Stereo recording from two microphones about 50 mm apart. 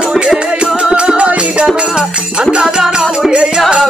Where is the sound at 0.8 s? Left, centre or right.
Centre.